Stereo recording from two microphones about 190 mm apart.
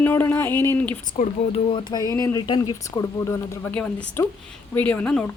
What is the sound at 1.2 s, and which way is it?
Speech, 30° left (ahead or behind).